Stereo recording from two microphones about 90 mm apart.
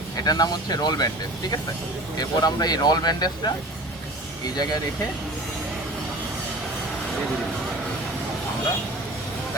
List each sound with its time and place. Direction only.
0.3 s speech: 50° left (ahead or behind)